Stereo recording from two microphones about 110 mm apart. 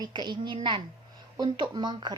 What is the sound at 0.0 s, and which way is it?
A woman's voice, 40° right (ahead or behind).